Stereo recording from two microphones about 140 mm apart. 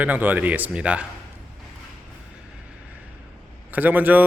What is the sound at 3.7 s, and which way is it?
Speech, 10° right (ahead or behind).